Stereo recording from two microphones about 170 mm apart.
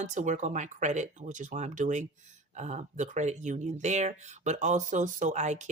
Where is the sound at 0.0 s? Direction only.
45° right (ahead or behind).